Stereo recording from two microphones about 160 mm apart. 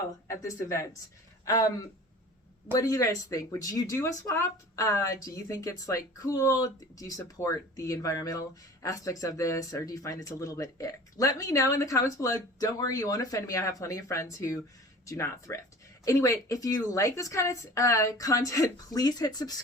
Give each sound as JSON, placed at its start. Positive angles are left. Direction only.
{"t": 0.3, "sound": "speech", "side_deg": 20}